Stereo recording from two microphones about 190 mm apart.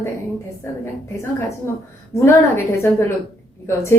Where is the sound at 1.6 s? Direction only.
15° left (ahead or behind).